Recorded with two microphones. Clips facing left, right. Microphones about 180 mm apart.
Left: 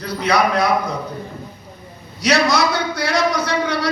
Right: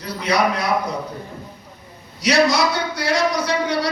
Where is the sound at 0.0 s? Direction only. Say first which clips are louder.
Left 2 dB; 55° left (ahead or behind).